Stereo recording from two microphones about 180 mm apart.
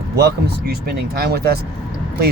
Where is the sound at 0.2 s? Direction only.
60° right (ahead or behind).